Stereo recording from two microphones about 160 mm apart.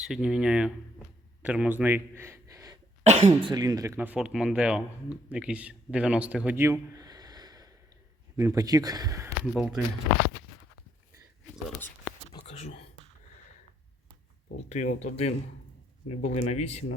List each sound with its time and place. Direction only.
0.0 s speech: 5° right (ahead or behind); by 2.7 s 20° right (ahead or behind)
3.0 s speech: 45° right (ahead or behind)
3.4 s speech: 25° right (ahead or behind)
9.4 s speech: 5° right (ahead or behind)
12.3 s whispering: 40° left (ahead or behind)
14.7 s speech: 45° left (ahead or behind)